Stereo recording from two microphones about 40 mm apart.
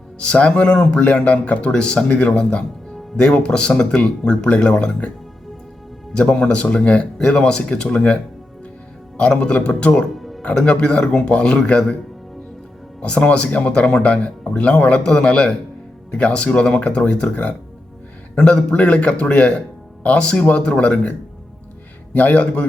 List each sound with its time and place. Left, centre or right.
0.2 s speech: left
6.1 s speech: left
9.3 s speech: left
10.2 s music: centre
10.5 s speech: left
13.0 s speech: left
18.3 s speech: left
22.1 s speech: left